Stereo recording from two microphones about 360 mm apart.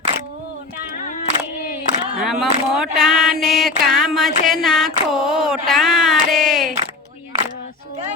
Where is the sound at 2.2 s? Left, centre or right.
Centre.